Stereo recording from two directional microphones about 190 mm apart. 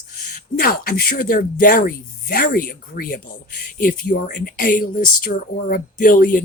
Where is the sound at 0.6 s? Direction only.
50° left (ahead or behind).